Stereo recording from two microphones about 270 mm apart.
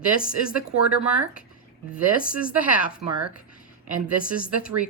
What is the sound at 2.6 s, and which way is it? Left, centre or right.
Speech, centre.